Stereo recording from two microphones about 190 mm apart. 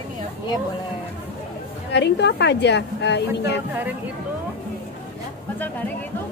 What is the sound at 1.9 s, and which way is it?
Speech, 60° left (ahead or behind).